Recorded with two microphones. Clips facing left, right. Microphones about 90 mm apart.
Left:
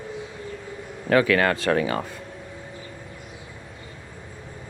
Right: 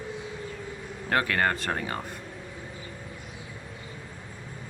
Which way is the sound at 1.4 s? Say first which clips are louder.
Left 6 dB; 90° left.